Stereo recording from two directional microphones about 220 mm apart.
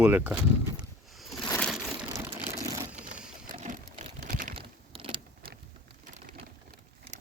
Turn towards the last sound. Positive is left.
turn(degrees=-25)  # may be behind; listen again after turning